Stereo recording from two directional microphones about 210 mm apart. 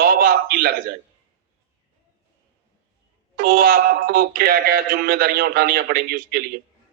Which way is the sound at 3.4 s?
45° right (ahead or behind).